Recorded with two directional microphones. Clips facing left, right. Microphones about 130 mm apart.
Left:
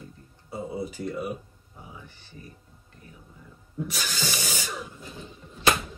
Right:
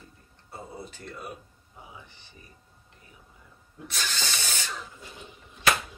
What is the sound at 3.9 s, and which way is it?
Spray, 10° left (ahead or behind).